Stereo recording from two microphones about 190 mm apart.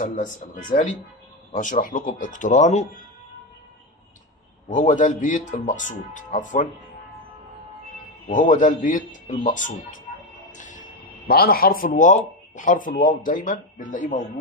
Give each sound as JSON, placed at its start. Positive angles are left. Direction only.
{"t": 0.0, "sound": "speech", "side_deg": 45}
{"t": 4.6, "sound": "speech", "side_deg": 40}
{"t": 8.3, "sound": "speech", "side_deg": 40}
{"t": 10.5, "sound": "music", "side_deg": 40}
{"t": 11.2, "sound": "speech", "side_deg": 50}